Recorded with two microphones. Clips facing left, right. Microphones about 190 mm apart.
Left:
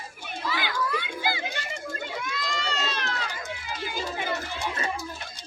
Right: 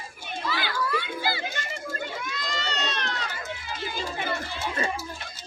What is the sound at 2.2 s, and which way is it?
Run, centre (ahead or behind).